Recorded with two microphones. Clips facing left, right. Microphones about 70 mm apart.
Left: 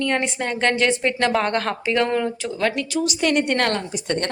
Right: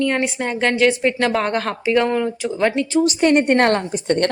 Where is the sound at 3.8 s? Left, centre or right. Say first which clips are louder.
Right 6 dB; right.